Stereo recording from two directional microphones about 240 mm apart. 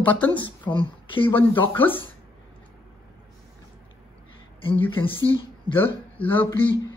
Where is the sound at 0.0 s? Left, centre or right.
Centre.